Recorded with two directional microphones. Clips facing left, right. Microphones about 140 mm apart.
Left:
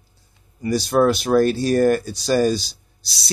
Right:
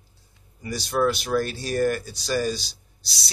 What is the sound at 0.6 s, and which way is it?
Speech, 50° left (ahead or behind).